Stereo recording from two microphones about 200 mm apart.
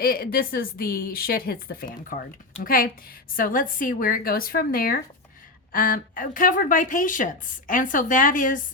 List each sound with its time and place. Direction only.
0.0 s a woman's voice: 50° left (ahead or behind)